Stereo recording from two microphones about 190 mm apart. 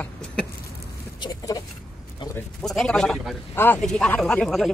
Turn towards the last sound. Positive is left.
turn(degrees=5)  # may be behind; listen again after turning